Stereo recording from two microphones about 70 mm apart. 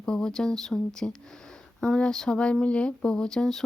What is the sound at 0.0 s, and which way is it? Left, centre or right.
Speech, centre.